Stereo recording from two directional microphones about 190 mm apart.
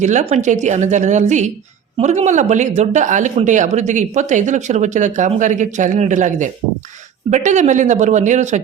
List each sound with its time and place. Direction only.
0.0 s speech: 40° right (ahead or behind)